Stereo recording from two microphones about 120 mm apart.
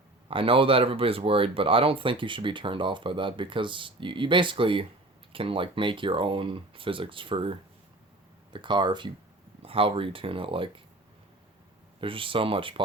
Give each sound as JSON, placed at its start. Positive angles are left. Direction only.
{"t": 0.3, "sound": "speech", "side_deg": -50}
{"t": 8.5, "sound": "speech", "side_deg": -40}
{"t": 11.9, "sound": "speech", "side_deg": -45}